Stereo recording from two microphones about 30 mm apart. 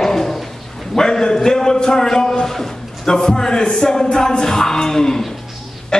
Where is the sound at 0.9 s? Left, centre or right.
Centre.